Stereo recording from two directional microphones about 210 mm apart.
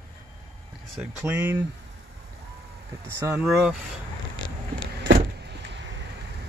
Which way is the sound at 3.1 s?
10° right (ahead or behind).